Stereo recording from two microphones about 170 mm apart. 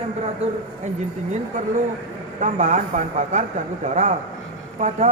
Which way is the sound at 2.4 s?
45° right (ahead or behind).